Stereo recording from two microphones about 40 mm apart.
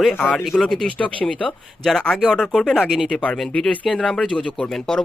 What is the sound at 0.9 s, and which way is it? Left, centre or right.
Speech, left.